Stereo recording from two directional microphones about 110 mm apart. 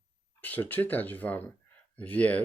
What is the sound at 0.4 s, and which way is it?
Speech, 15° left (ahead or behind).